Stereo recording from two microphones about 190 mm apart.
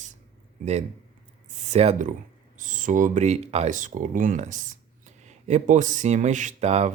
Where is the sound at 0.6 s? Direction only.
35° right (ahead or behind).